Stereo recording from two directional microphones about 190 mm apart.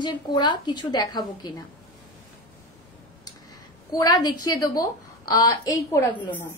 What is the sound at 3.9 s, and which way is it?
A woman's voice, 20° left (ahead or behind).